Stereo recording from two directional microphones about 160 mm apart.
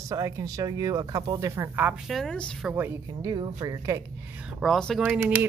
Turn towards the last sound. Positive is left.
turn(degrees=-10)  # may be behind; listen again after turning